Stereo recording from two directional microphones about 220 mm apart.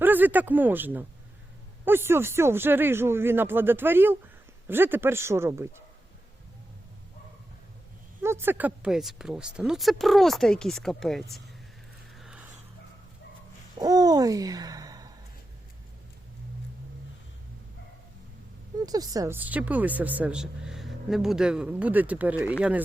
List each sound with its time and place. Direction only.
0.0 s speech: 10° right (ahead or behind)
8.2 s speech: 10° right (ahead or behind)
12.1 s a sound: 5° right (ahead or behind)
13.7 s hoot: 15° right (ahead or behind)
18.8 s speech: 15° right (ahead or behind)